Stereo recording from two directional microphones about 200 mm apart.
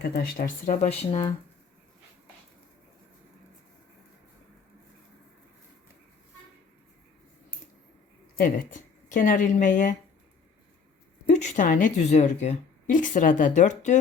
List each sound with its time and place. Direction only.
0.0 s a woman's voice: 55° left (ahead or behind); by 1.3 s 30° left (ahead or behind)
8.4 s speech: 45° left (ahead or behind)
11.3 s a woman's voice: 40° left (ahead or behind)